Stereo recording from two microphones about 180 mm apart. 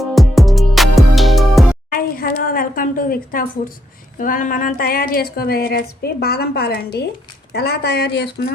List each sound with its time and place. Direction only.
0.0 s music: centre (ahead or behind)
1.9 s a woman's voice: 55° left (ahead or behind)